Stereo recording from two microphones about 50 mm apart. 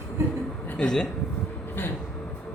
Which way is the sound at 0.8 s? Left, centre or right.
Centre.